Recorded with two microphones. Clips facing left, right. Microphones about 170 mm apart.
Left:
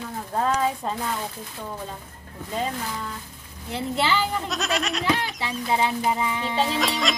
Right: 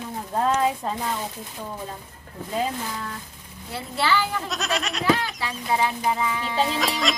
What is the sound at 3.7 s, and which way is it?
Speech, 20° left (ahead or behind).